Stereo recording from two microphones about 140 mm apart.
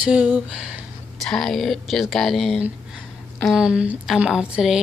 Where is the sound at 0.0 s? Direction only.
5° right (ahead or behind).